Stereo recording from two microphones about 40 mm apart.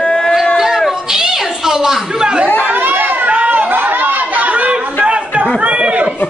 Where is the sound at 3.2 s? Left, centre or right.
Right.